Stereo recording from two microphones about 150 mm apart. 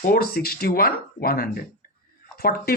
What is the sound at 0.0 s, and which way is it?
Speech, 80° left.